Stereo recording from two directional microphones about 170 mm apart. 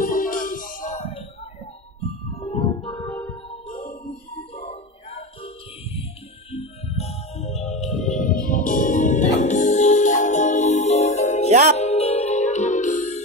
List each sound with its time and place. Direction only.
0.0 s music: 55° left (ahead or behind)
2.4 s music: 35° left (ahead or behind)
2.7 s music: 25° left (ahead or behind)
3.1 s music: 15° left (ahead or behind)
3.7 s music: 55° left (ahead or behind)
4.1 s music: 35° left (ahead or behind)
6.5 s music: 40° left (ahead or behind)
8.1 s music: 50° left (ahead or behind)